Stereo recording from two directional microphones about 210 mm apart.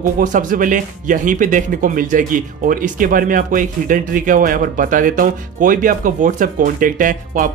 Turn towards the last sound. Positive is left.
turn(degrees=-40)  # may be behind; listen again after turning